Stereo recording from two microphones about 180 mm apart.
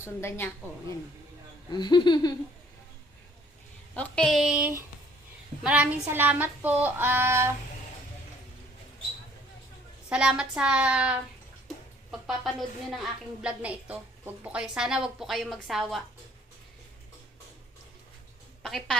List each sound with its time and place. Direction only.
0.0 s a woman's voice: 15° left (ahead or behind)
1.7 s speech: 25° left (ahead or behind)
3.9 s a woman's voice: 5° left (ahead or behind); by 4.8 s 10° right (ahead or behind)
5.6 s a sound: 10° right (ahead or behind)
10.1 s a woman's voice: 5° right (ahead or behind)
18.6 s a woman's voice: 5° left (ahead or behind)